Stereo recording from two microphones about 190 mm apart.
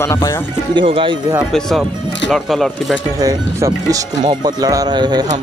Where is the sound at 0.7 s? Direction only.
25° right (ahead or behind).